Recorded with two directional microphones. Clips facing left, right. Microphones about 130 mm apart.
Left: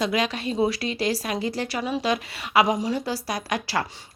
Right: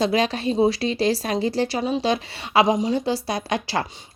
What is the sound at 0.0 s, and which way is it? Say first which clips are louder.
A woman's voice: right 4 dB; 30° right (ahead or behind).